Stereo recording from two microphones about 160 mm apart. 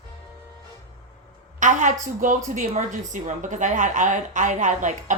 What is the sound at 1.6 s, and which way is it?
A woman's voice, 55° right (ahead or behind).